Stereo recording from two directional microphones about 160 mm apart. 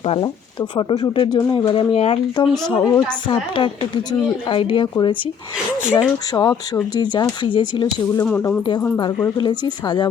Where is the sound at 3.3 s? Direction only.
30° left (ahead or behind).